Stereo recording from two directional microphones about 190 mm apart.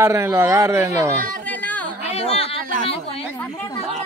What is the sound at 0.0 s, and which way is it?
Speech, 15° right (ahead or behind).